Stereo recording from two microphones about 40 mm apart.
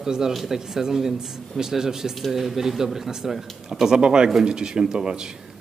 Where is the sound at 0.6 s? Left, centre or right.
Centre.